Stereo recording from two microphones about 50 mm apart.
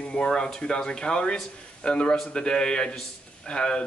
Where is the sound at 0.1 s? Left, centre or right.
Centre.